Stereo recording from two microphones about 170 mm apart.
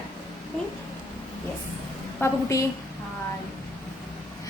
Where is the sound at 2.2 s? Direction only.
20° left (ahead or behind).